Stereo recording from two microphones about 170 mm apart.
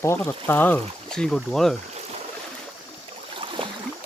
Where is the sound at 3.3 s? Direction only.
30° right (ahead or behind).